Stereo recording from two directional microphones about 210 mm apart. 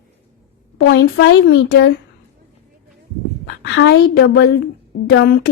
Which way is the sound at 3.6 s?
60° left (ahead or behind).